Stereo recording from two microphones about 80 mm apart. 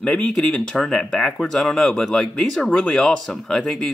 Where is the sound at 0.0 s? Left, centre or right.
Centre.